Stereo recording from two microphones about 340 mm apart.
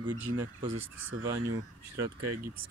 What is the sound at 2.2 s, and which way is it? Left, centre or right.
Speech, right.